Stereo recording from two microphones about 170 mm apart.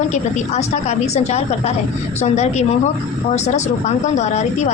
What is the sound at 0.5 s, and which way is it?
A woman's voice, 40° left (ahead or behind).